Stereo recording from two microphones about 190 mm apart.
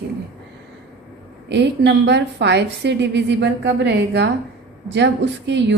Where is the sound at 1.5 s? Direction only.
65° right (ahead or behind).